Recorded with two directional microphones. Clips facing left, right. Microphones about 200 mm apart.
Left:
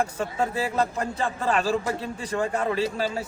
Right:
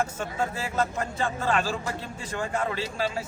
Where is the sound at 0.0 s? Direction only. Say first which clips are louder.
Left 3 dB; 35° left (ahead or behind).